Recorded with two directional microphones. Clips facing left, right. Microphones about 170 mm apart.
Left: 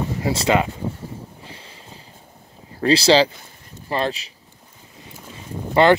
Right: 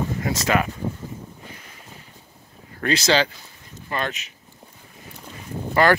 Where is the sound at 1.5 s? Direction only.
30° left (ahead or behind).